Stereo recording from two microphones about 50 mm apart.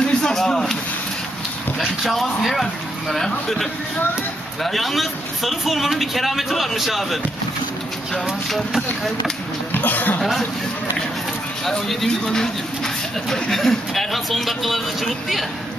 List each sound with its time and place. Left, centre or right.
0.0 s a sound: centre
1.8 s speech: centre
4.6 s speech: centre
8.5 s speech: centre
9.7 s speech: left
11.9 s speech: centre